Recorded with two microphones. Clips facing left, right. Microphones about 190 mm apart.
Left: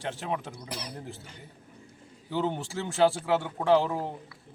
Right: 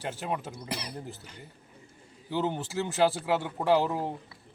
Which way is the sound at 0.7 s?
65° right (ahead or behind).